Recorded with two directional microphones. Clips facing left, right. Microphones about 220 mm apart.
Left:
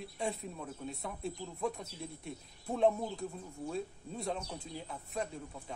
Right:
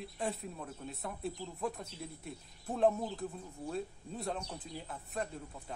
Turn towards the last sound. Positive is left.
turn(degrees=0)  # may be behind; listen again after turning